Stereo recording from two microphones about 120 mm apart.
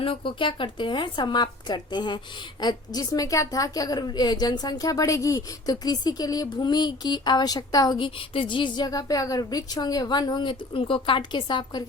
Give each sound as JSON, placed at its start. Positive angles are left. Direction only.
{"t": 0.0, "sound": "speech", "side_deg": 45}
{"t": 7.9, "sound": "speech", "side_deg": 45}